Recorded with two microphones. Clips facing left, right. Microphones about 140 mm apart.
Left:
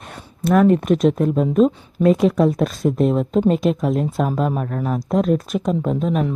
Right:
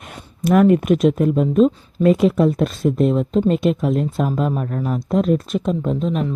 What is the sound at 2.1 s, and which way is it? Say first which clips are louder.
Speech: right 1 dB; centre (ahead or behind).